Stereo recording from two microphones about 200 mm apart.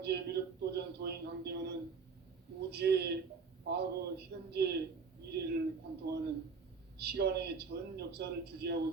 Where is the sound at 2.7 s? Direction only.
55° right (ahead or behind).